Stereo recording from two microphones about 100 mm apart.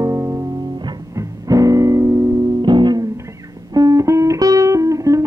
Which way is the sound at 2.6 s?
50° right (ahead or behind).